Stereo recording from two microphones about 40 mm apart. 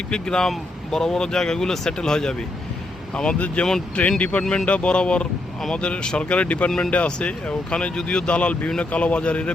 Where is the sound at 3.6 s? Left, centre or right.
Left.